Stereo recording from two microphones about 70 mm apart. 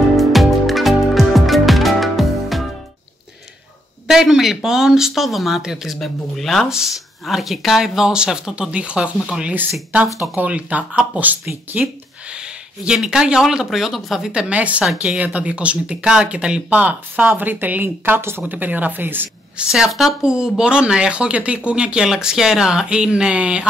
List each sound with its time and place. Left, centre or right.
0.2 s music: centre
4.1 s a woman's voice: centre
12.3 s speech: centre
14.3 s a woman's voice: centre
17.4 s a woman's voice: right
19.7 s speech: centre